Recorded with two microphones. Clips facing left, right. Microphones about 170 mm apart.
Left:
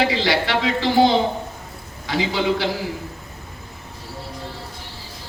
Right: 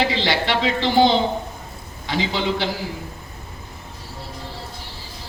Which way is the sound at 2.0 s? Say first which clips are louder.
Left 2 dB; 25° right (ahead or behind).